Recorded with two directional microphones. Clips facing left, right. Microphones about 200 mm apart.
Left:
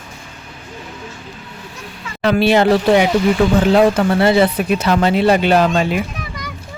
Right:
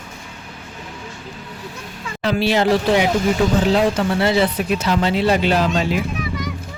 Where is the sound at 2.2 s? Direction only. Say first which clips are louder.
Left 5 dB; 60° left (ahead or behind).